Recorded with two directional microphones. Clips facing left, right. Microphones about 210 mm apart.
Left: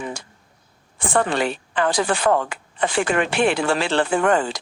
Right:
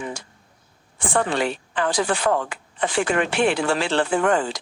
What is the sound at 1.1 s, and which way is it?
Speech, 60° left (ahead or behind).